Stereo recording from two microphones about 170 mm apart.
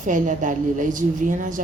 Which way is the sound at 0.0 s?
50° right (ahead or behind).